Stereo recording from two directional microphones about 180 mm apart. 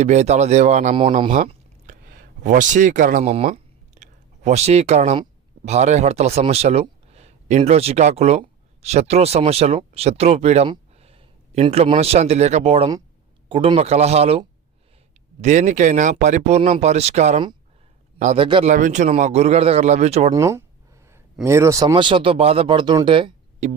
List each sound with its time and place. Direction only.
0.0 s speech: 40° right (ahead or behind)
0.9 s speech: 30° right (ahead or behind)
1.3 s a sound: 45° right (ahead or behind)
5.6 s a man's voice: 40° right (ahead or behind)
18.4 s speech: 30° right (ahead or behind)
18.7 s speech: 45° right (ahead or behind)
20.3 s speech: 15° right (ahead or behind); by 23.7 s 35° right (ahead or behind)